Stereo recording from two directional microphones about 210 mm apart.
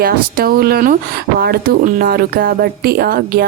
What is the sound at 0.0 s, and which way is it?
Speech, 45° right (ahead or behind).